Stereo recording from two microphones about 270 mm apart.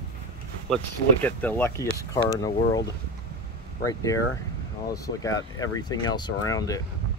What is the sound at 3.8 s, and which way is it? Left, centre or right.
Speech, centre.